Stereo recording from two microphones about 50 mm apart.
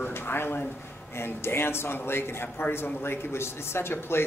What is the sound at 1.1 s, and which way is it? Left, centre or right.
Speech, left.